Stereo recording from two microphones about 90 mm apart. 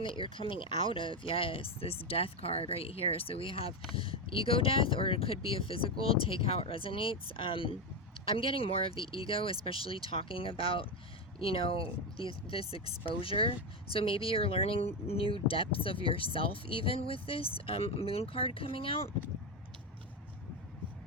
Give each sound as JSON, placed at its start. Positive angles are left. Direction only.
{"t": 0.0, "sound": "speech", "side_deg": 70}
{"t": 8.2, "sound": "speech", "side_deg": 90}